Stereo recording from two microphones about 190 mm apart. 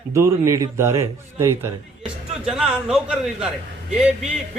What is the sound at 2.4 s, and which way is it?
A man's voice, 5° right (ahead or behind).